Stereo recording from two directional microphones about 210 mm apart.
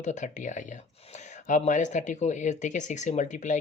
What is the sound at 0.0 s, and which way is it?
Speech, 35° left (ahead or behind).